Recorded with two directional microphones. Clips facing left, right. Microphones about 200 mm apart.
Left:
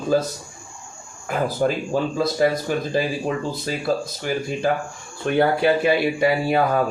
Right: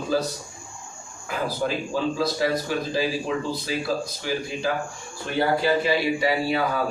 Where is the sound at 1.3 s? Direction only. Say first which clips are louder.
Left 5 dB; 50° left (ahead or behind).